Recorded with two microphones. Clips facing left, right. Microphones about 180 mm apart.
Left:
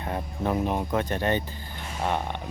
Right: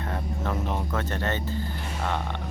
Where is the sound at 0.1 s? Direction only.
15° left (ahead or behind).